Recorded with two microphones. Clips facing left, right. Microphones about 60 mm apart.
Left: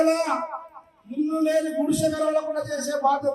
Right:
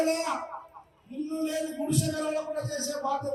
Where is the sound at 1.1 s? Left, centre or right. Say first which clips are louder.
Left 9 dB; left.